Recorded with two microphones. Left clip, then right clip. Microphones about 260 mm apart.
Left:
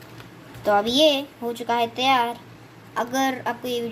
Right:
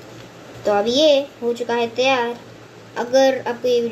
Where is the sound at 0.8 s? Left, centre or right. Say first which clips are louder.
Right 7 dB; left.